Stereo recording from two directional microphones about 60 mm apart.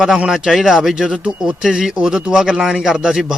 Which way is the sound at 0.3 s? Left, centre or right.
Centre.